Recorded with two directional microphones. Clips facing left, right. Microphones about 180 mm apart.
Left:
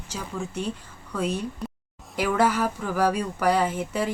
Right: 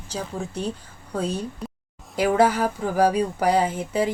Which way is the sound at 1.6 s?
Centre (ahead or behind).